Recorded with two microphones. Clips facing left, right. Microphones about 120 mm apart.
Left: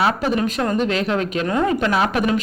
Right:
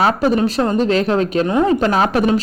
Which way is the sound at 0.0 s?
35° right (ahead or behind).